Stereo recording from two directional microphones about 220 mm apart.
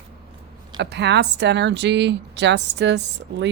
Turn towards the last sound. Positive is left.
turn(degrees=-50)  # may be behind; listen again after turning